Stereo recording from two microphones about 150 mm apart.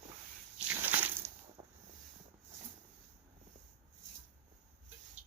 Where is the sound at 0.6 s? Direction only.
10° right (ahead or behind).